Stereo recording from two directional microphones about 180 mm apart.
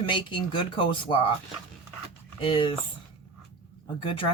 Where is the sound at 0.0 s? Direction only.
25° left (ahead or behind).